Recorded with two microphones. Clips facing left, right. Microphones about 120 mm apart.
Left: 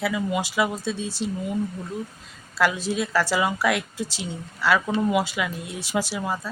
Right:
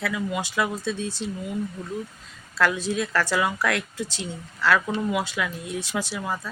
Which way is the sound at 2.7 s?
15° right (ahead or behind).